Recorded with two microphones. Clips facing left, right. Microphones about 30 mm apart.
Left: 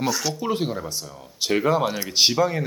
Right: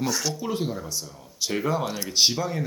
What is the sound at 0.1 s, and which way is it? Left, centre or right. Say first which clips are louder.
Speech: left 2 dB; centre.